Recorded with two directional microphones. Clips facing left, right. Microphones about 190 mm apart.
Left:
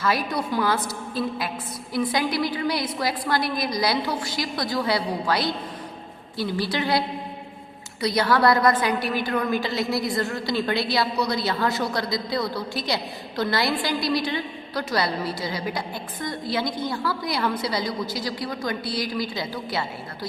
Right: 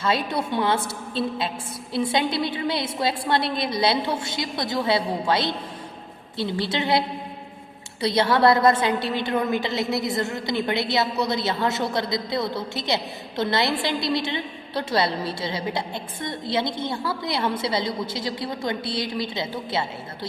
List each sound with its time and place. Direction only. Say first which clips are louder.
0.0 s a woman's voice: right 1 dB; 25° right (ahead or behind)
8.0 s a woman's voice: right 1 dB; 25° right (ahead or behind)